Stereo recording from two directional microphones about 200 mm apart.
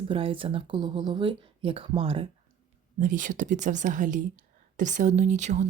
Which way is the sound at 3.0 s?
40° right (ahead or behind).